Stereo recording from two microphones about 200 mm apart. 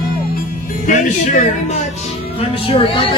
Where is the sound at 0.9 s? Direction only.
40° left (ahead or behind).